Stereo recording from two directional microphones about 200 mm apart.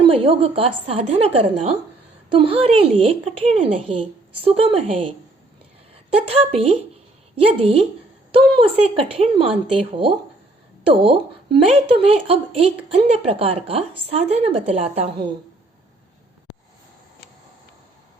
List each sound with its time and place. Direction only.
0.0 s a woman's voice: 30° right (ahead or behind)